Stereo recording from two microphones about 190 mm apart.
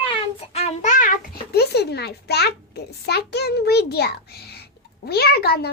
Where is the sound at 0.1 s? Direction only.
35° left (ahead or behind); by 2.5 s 60° left (ahead or behind).